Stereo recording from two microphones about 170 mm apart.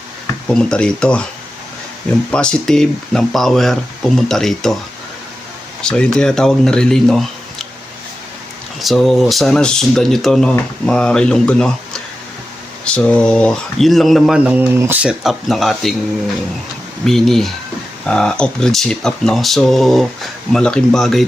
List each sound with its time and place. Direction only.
0.4 s speech: 5° left (ahead or behind)
2.3 s speech: 5° left (ahead or behind)
5.8 s speech: 5° left (ahead or behind)
8.8 s speech: centre (ahead or behind)
12.8 s speech: 5° left (ahead or behind)
17.1 s speech: centre (ahead or behind)